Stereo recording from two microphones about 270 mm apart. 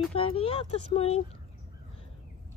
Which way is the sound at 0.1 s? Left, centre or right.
Left.